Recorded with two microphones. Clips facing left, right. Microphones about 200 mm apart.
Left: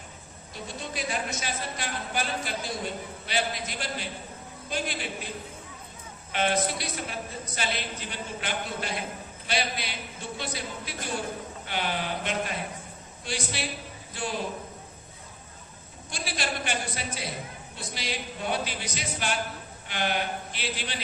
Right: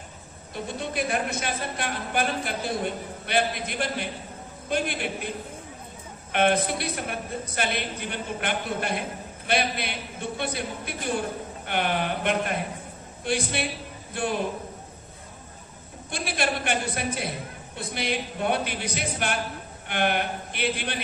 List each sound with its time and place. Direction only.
0.5 s a woman's voice: 55° right (ahead or behind)
6.3 s a woman's voice: 55° right (ahead or behind)
16.1 s a woman's voice: 55° right (ahead or behind)